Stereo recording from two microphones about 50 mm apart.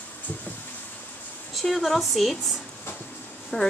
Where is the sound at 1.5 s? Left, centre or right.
Centre.